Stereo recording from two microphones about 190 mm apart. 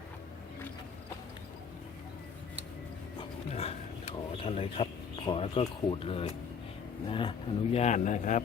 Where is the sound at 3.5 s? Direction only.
30° left (ahead or behind).